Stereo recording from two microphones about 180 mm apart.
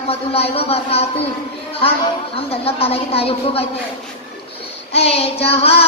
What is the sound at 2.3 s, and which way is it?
A woman's voice, 35° left (ahead or behind).